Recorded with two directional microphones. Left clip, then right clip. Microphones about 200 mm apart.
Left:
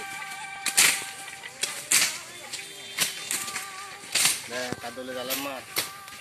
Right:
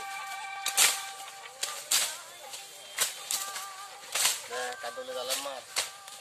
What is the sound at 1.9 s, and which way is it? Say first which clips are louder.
Whip: left 6 dB; 60° right (ahead or behind).